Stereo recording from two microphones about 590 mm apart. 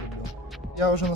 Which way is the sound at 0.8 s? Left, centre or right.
Left.